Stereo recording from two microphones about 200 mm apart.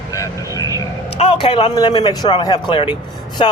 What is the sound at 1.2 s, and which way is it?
A man's voice, 30° left (ahead or behind).